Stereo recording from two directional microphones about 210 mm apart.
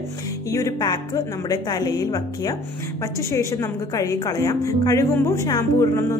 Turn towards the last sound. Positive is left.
turn(degrees=15)  # may be behind; listen again after turning